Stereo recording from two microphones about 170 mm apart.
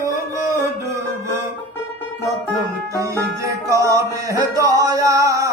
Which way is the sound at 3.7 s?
20° right (ahead or behind).